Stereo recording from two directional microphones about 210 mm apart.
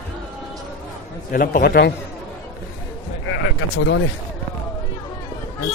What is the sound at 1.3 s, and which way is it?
Speech, 40° left (ahead or behind).